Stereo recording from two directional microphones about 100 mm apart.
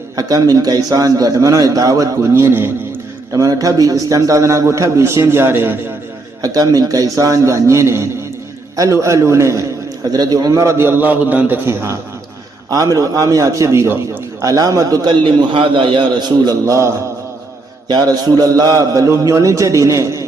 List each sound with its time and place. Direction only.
0.2 s a man's voice: 40° right (ahead or behind)
3.3 s a man's voice: 35° right (ahead or behind)
6.4 s a man's voice: 40° right (ahead or behind)
13.0 s a man's voice: 35° right (ahead or behind)
15.2 s a man's voice: 55° right (ahead or behind)
16.5 s a man's voice: 30° right (ahead or behind)